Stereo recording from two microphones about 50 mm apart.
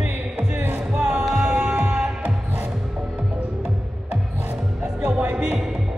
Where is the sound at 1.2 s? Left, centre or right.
Centre.